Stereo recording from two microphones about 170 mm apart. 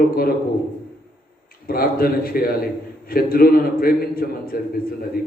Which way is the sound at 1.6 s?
60° left (ahead or behind).